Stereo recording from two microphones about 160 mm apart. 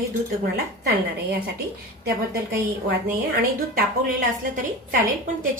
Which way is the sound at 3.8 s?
55° right (ahead or behind).